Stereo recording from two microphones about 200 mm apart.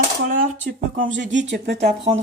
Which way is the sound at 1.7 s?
30° right (ahead or behind).